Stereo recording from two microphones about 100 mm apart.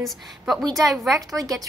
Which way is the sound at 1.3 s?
35° right (ahead or behind).